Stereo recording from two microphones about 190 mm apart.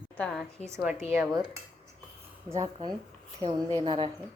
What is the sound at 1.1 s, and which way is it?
Cutlery, 15° right (ahead or behind).